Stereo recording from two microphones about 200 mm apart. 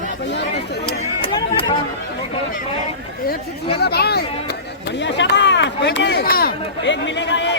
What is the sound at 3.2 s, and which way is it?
Chatter, 55° left (ahead or behind).